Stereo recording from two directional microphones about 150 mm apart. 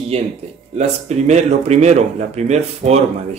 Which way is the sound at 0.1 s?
40° right (ahead or behind).